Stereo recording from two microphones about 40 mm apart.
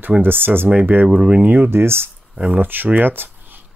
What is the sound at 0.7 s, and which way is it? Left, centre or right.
Speech, right.